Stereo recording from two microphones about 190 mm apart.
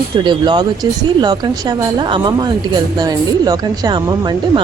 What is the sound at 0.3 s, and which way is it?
A woman's voice, 25° right (ahead or behind).